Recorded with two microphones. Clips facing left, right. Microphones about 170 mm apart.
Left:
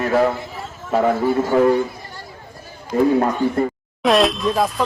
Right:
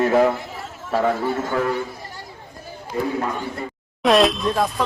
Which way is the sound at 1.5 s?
20° left (ahead or behind).